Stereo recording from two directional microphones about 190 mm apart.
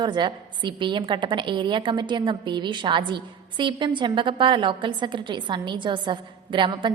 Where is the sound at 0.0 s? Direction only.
25° right (ahead or behind).